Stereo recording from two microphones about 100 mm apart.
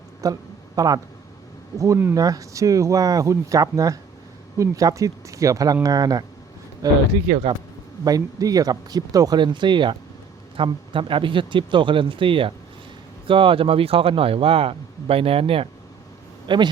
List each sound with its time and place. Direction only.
0.2 s speech: 35° right (ahead or behind)
1.8 s speech: 25° right (ahead or behind)
7.3 s speech: 75° right (ahead or behind)
8.0 s speech: 40° right (ahead or behind)
9.4 s speech: 50° right (ahead or behind); by 15.7 s 70° right (ahead or behind)
16.5 s speech: 55° right (ahead or behind)